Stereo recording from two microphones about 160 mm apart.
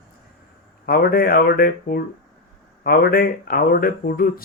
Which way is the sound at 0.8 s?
65° left (ahead or behind).